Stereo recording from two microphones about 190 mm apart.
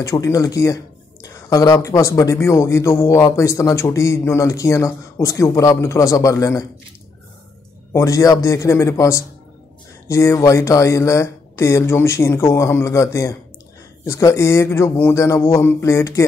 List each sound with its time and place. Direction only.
0.0 s speech: 15° left (ahead or behind)
7.9 s speech: 15° left (ahead or behind)